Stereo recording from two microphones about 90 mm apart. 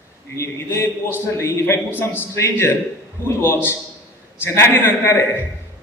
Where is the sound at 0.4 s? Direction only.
30° left (ahead or behind).